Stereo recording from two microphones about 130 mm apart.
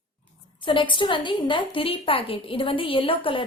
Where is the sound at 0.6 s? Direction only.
40° left (ahead or behind).